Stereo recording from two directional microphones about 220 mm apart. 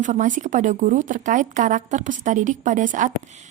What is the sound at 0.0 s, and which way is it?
Speech, 35° right (ahead or behind).